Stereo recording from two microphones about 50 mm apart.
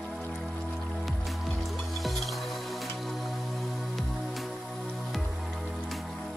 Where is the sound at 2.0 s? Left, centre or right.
Centre.